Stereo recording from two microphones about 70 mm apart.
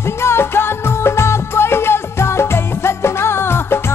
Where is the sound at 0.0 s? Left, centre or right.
Left.